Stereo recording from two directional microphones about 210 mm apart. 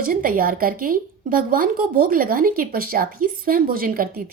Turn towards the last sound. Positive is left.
turn(degrees=-45)  # may be behind; listen again after turning